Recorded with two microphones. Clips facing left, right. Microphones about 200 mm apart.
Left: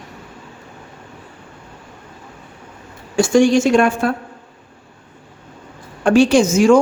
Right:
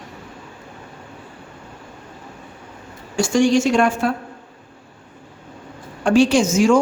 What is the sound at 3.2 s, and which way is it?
Speech, 55° left (ahead or behind).